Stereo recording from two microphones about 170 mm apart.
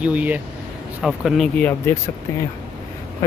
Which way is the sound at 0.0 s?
10° right (ahead or behind).